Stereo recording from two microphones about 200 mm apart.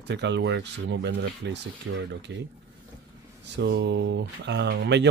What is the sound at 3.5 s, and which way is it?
Speech, 60° right (ahead or behind).